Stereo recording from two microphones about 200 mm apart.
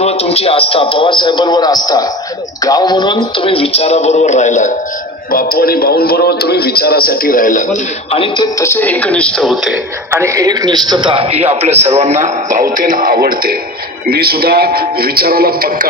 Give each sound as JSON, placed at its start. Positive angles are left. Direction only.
{"t": 0.0, "sound": "a man's voice", "side_deg": 30}
{"t": 8.5, "sound": "a man's voice", "side_deg": 10}